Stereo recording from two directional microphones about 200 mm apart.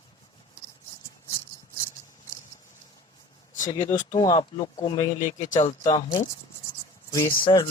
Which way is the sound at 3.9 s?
20° left (ahead or behind).